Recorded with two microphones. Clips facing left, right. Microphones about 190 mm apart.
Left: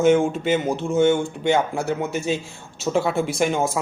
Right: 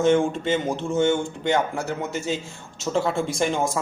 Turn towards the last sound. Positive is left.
turn(degrees=5)  # may be behind; listen again after turning